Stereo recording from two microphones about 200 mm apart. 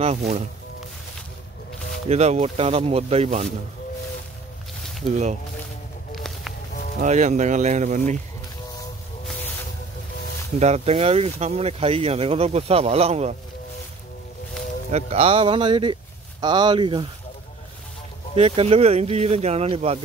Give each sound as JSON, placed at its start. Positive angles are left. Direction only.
{"t": 2.0, "sound": "speech", "side_deg": -30}
{"t": 6.1, "sound": "a sound", "side_deg": 0}
{"t": 7.0, "sound": "speech", "side_deg": -35}
{"t": 10.6, "sound": "speech", "side_deg": -30}
{"t": 14.9, "sound": "speech", "side_deg": -30}
{"t": 18.3, "sound": "speech", "side_deg": -30}